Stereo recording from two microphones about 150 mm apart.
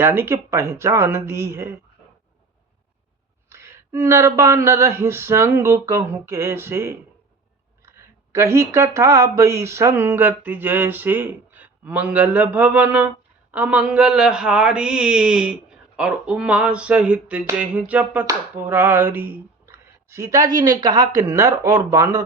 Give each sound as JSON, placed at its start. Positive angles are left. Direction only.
{"t": 0.0, "sound": "speech", "side_deg": -15}
{"t": 3.5, "sound": "a man's voice", "side_deg": -15}
{"t": 18.3, "sound": "a sound", "side_deg": -15}